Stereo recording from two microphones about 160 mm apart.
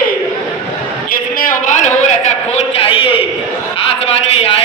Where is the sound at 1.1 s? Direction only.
60° left (ahead or behind).